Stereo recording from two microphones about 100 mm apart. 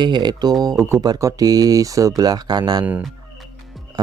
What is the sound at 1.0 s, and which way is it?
Speech, 35° right (ahead or behind).